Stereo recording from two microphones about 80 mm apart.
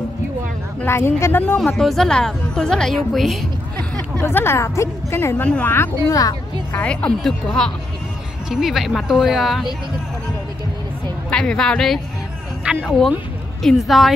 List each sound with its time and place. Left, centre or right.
0.8 s a woman's voice: left
1.8 s a woman's voice: centre
4.2 s a woman's voice: left
6.0 s a woman's voice: left
6.7 s a woman's voice: centre
8.5 s a woman's voice: centre
11.2 s a woman's voice: centre
12.7 s speech: centre
13.6 s a woman's voice: centre